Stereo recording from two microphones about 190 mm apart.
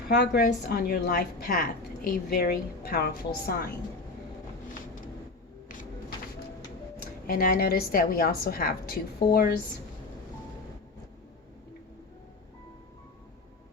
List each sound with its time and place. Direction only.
0.1 s a woman's voice: 55° left (ahead or behind)
7.0 s a woman's voice: 50° left (ahead or behind)